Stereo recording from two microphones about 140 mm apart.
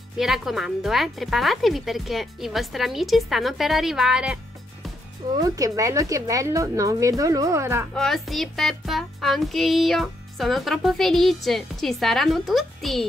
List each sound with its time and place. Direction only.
0.2 s music: centre (ahead or behind)
5.3 s speech: 25° right (ahead or behind)
7.9 s music: centre (ahead or behind)